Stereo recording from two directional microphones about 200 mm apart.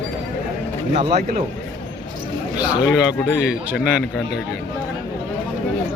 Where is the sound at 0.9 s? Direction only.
35° right (ahead or behind).